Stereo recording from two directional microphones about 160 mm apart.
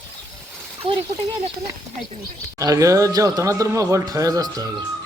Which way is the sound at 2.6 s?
20° right (ahead or behind).